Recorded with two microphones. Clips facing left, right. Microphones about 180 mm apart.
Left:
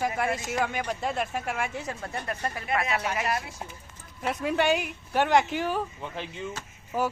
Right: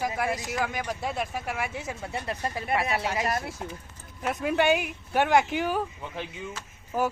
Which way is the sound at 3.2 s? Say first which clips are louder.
Right 1 dB; 45° right (ahead or behind).